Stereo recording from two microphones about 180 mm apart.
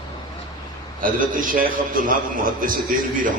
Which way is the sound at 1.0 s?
50° right (ahead or behind).